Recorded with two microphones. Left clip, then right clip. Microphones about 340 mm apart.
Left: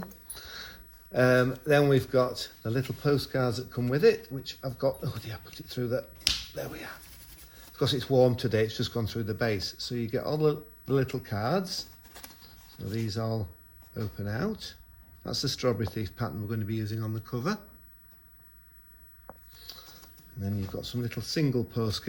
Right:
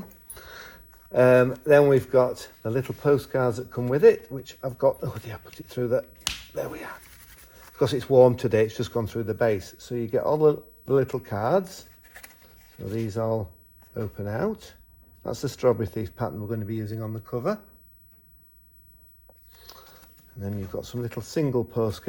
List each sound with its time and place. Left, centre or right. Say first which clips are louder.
0.3 s speech: even; centre
12.9 s speech: right 7 dB; centre
20.4 s speech: right 3 dB; centre